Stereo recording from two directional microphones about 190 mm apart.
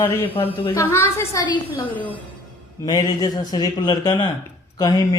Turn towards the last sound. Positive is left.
turn(degrees=20)  # may be behind; listen again after turning